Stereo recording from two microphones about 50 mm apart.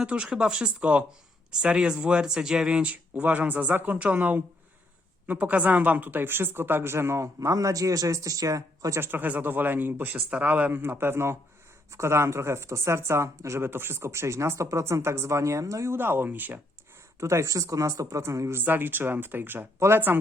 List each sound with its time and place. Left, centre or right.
0.3 s speech: centre
2.8 s speech: right
9.0 s speech: right
13.7 s speech: right
15.9 s speech: right
17.2 s speech: right
18.6 s speech: right